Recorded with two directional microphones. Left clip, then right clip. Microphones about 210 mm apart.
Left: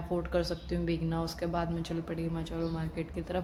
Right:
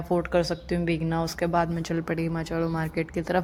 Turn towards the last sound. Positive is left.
turn(degrees=-40)  # may be behind; listen again after turning